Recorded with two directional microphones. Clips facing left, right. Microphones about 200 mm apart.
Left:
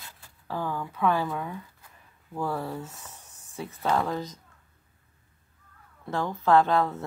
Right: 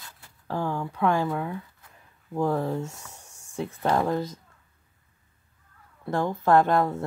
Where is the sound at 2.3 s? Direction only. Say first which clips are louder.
Right 5 dB; 20° right (ahead or behind).